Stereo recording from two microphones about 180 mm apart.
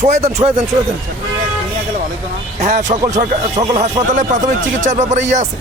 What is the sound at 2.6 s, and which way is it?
Speech, 40° right (ahead or behind).